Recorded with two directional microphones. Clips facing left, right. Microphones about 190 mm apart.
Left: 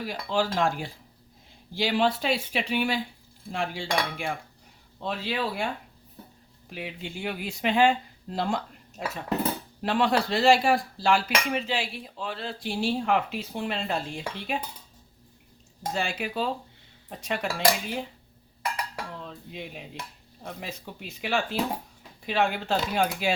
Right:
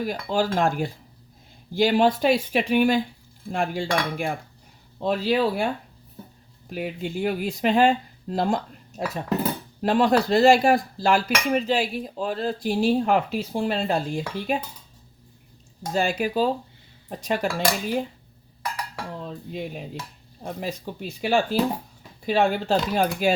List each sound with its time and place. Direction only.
0.0 s speech: 45° right (ahead or behind)
6.7 s speech: 45° right (ahead or behind)
16.0 s speech: 40° right (ahead or behind)
19.2 s speech: 40° right (ahead or behind)